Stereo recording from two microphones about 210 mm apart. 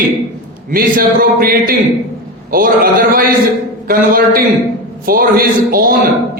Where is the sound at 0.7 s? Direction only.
45° right (ahead or behind).